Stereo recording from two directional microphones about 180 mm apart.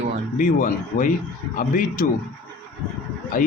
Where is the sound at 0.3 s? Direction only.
45° left (ahead or behind).